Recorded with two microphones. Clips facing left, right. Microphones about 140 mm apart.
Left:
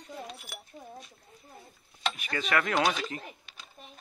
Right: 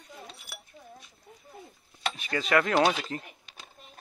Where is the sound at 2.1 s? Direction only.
30° right (ahead or behind).